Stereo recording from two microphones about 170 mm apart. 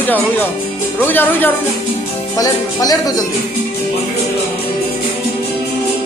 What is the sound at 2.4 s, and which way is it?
Speech, 20° left (ahead or behind).